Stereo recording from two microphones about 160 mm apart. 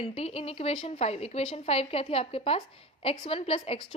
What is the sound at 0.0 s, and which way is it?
A woman's voice, 35° left (ahead or behind).